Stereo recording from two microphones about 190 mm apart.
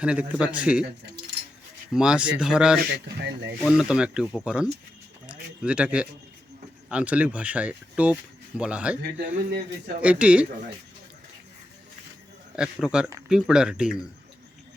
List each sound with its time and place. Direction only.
0.0 s speech: 5° right (ahead or behind)
1.9 s speech: 5° right (ahead or behind)
3.2 s speech: 65° right (ahead or behind)
3.6 s speech: 5° right (ahead or behind)
5.2 s a sound: 5° right (ahead or behind)
6.9 s speech: 5° right (ahead or behind)
9.0 s speech: 60° right (ahead or behind)
10.0 s speech: 5° right (ahead or behind)
12.5 s speech: 5° right (ahead or behind)